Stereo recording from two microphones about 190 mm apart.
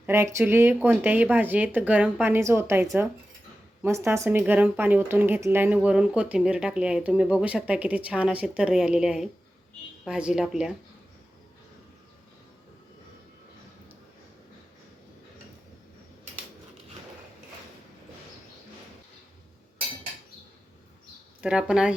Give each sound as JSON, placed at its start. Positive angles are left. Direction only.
{"t": 0.0, "sound": "a woman's voice", "side_deg": -15}
{"t": 21.4, "sound": "speech", "side_deg": -5}